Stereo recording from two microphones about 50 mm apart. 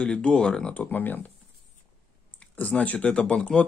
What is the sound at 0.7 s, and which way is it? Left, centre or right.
Speech, left.